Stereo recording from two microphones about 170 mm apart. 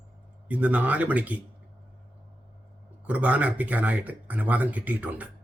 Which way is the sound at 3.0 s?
10° right (ahead or behind).